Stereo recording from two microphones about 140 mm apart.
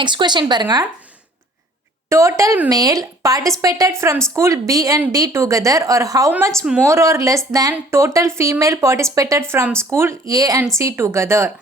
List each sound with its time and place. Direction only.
0.0 s speech: 35° right (ahead or behind)
2.0 s a woman's voice: 20° right (ahead or behind)